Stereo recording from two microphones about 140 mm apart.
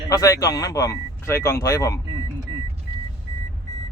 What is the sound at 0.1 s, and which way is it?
Speech, 25° left (ahead or behind).